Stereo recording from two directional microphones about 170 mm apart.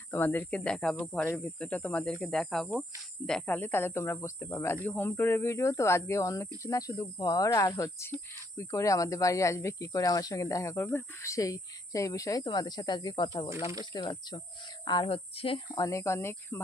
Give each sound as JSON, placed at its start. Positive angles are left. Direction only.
{"t": 0.1, "sound": "speech", "side_deg": 15}